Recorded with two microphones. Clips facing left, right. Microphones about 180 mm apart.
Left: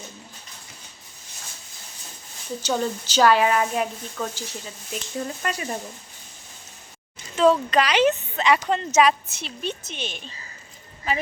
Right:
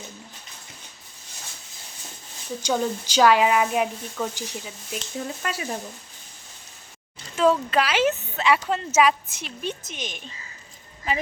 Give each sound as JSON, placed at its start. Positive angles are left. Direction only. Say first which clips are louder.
{"t": 2.6, "sound": "speech", "louder": "right 1 dB", "side_deg": -10}
{"t": 7.3, "sound": "speech", "louder": "left 2 dB", "side_deg": -5}